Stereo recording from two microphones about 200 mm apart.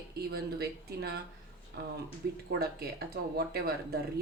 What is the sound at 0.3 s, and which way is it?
Speech, 55° right (ahead or behind).